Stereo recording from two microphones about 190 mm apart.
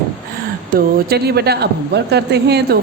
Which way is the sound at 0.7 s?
55° right (ahead or behind).